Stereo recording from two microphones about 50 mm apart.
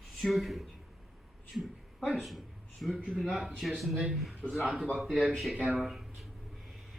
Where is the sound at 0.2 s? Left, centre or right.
Centre.